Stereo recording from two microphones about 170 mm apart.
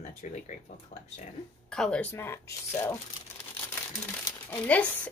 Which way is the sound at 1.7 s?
5° left (ahead or behind).